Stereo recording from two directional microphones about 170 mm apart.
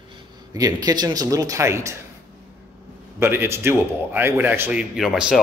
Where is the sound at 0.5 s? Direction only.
20° right (ahead or behind).